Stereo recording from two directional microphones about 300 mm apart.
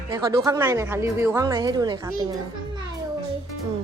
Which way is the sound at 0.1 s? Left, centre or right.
Centre.